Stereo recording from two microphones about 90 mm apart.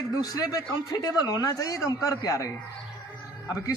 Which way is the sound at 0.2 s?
45° left (ahead or behind).